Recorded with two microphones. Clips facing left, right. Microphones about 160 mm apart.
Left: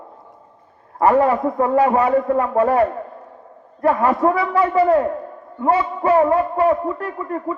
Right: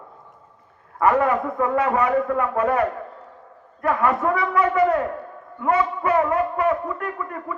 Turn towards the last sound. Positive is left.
turn(degrees=30)  # may be behind; listen again after turning